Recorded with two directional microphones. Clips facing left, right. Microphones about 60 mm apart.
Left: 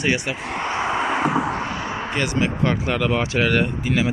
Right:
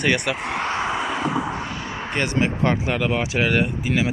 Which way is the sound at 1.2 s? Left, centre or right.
Left.